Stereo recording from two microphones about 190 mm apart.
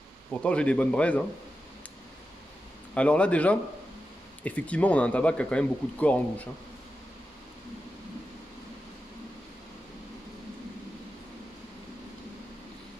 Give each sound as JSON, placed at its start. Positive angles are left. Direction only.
{"t": 0.3, "sound": "speech", "side_deg": 5}
{"t": 2.9, "sound": "speech", "side_deg": 5}